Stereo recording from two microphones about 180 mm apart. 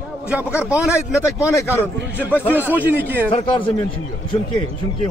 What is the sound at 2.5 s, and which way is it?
Speech, 10° right (ahead or behind).